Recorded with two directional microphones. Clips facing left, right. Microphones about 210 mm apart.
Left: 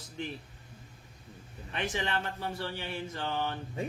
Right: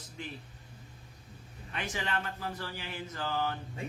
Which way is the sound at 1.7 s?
30° left (ahead or behind).